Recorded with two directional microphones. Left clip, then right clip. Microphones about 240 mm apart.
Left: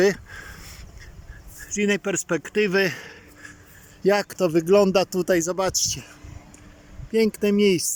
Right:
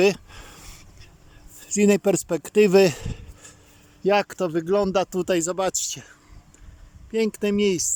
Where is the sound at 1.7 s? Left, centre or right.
Centre.